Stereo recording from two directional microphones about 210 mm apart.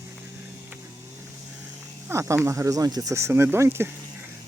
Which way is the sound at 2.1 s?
15° right (ahead or behind).